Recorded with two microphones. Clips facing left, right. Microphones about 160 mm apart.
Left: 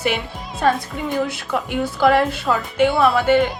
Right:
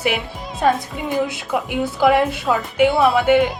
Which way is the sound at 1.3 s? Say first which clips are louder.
Right 1 dB; 20° right (ahead or behind).